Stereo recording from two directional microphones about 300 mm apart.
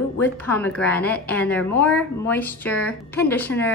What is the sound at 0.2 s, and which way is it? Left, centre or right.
A woman's voice, centre.